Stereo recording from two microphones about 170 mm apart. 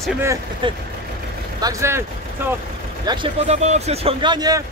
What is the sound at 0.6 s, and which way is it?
Speech, 30° right (ahead or behind).